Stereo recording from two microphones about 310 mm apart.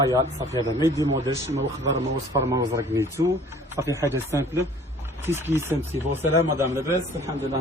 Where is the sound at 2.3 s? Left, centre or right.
Centre.